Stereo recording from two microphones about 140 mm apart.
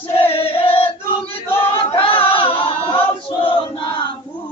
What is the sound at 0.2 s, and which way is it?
Choir, 45° left (ahead or behind).